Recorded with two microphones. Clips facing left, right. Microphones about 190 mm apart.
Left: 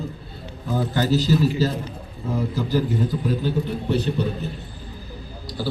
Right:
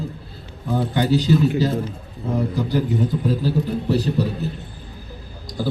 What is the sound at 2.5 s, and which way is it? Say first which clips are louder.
Speech: right 1 dB; 15° right (ahead or behind).